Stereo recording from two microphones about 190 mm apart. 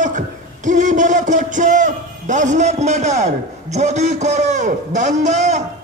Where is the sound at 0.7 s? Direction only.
40° right (ahead or behind).